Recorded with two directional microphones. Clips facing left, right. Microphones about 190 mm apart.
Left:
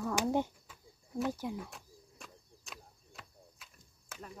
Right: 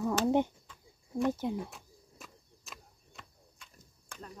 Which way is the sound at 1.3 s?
25° right (ahead or behind).